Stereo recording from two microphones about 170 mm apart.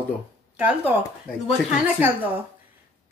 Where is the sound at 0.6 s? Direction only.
10° right (ahead or behind).